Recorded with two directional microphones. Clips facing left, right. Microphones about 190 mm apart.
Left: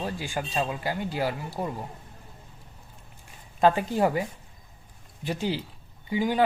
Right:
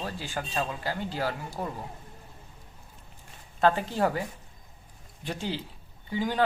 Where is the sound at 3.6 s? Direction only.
15° left (ahead or behind).